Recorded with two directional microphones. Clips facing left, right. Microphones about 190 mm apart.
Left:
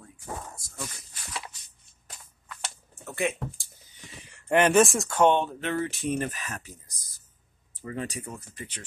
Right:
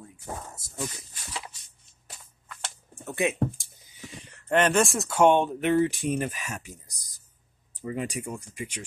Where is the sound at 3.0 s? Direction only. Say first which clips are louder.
Right 2 dB; 20° right (ahead or behind).